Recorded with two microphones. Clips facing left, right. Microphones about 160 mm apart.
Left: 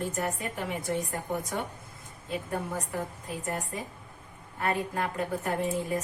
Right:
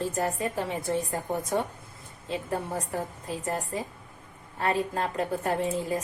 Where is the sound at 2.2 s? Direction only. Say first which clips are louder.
Right 2 dB; 30° right (ahead or behind).